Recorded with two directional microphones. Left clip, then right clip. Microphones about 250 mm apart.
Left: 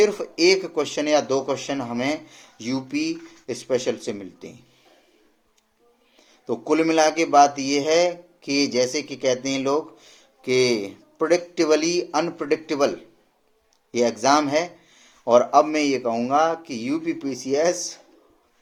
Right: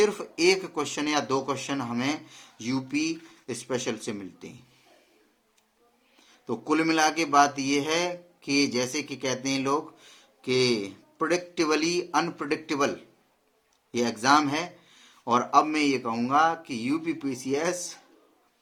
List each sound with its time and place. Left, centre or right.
0.0 s a man's voice: centre
6.4 s a man's voice: centre